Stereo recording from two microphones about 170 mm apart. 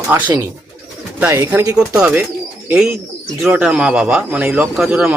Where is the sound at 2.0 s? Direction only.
5° right (ahead or behind).